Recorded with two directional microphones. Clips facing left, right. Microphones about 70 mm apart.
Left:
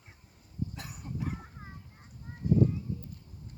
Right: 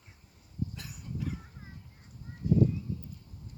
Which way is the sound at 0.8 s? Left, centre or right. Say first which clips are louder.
Left 1 dB; left.